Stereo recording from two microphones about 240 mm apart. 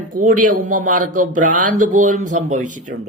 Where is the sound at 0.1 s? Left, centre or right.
Right.